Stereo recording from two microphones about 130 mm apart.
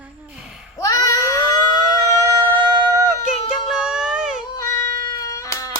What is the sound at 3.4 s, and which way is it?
Child singing, 5° right (ahead or behind).